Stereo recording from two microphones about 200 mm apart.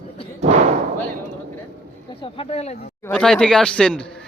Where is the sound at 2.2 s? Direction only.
30° left (ahead or behind).